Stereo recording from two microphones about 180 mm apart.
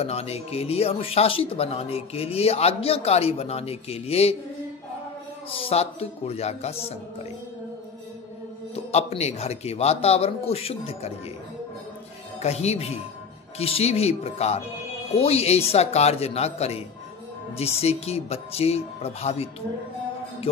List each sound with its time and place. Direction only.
0.0 s speech: 35° left (ahead or behind)
5.5 s speech: 30° left (ahead or behind)
8.7 s speech: 35° left (ahead or behind)
12.4 s speech: 35° left (ahead or behind)